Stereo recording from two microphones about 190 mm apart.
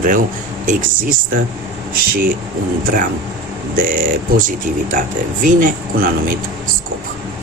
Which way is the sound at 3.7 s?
45° right (ahead or behind).